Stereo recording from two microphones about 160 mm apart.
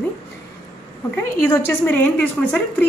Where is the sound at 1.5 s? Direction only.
15° left (ahead or behind).